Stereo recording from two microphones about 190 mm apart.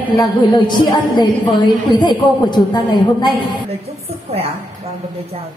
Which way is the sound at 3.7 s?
30° right (ahead or behind).